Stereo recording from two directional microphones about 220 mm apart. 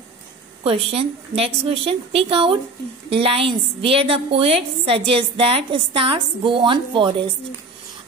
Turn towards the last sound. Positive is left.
turn(degrees=-25)  # may be behind; listen again after turning